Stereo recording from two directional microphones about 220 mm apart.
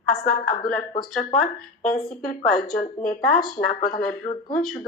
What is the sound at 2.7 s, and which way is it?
A woman's voice, 35° left (ahead or behind).